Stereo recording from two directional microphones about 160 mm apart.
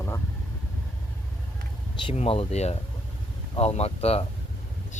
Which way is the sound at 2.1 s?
40° left (ahead or behind).